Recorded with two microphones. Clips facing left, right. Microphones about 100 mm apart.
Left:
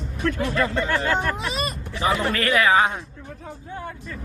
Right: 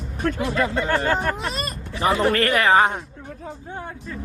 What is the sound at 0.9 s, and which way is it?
Speech, 45° right (ahead or behind).